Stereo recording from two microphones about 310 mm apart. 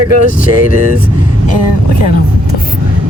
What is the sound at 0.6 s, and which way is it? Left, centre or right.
Speech, left.